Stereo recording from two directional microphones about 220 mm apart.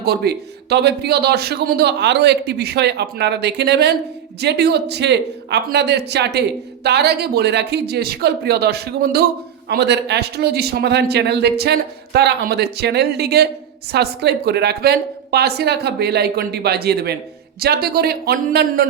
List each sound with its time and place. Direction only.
0.0 s a man's voice: 45° right (ahead or behind)